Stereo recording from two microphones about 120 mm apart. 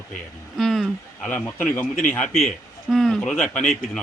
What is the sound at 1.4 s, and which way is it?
A man's voice, 15° left (ahead or behind).